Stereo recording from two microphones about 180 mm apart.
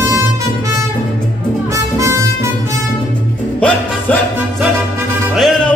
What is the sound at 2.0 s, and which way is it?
Harmonica, 15° right (ahead or behind).